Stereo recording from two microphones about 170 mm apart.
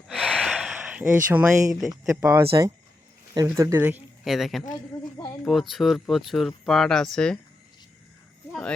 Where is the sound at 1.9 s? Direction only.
20° right (ahead or behind); by 7.3 s 5° left (ahead or behind).